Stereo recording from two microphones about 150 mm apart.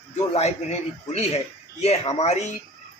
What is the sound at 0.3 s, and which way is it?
Speech, 45° left (ahead or behind).